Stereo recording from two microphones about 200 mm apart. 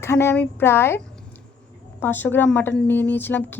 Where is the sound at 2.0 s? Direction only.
10° left (ahead or behind).